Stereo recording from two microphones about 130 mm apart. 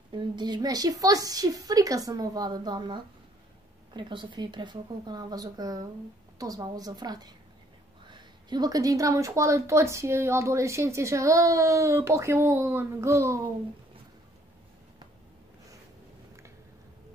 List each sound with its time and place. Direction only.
0.1 s a woman's voice: 35° right (ahead or behind)